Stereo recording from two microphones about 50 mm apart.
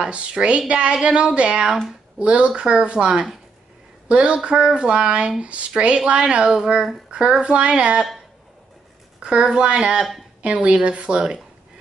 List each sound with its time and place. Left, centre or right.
0.0 s speech: right
4.1 s speech: right
9.2 s speech: centre